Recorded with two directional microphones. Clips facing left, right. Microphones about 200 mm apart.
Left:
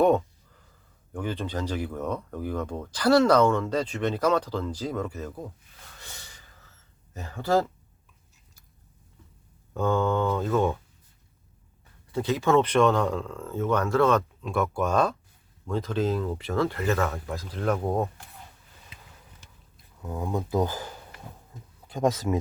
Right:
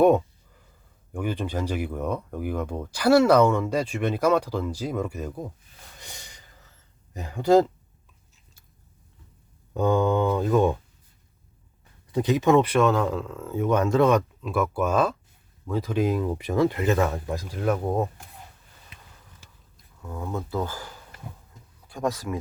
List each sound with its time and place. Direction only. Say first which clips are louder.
1.1 s speech: right 2 dB; 10° right (ahead or behind)
6.0 s snort: right 2 dB; 15° right (ahead or behind)
7.1 s speech: right 6 dB; 15° right (ahead or behind)
9.7 s speech: right 3 dB; 15° right (ahead or behind)
12.1 s speech: right 3 dB; 15° right (ahead or behind)
14.4 s speech: right 2 dB; centre (ahead or behind)
20.0 s speech: left 2 dB; 15° left (ahead or behind)
21.8 s speech: left 3 dB; 20° left (ahead or behind)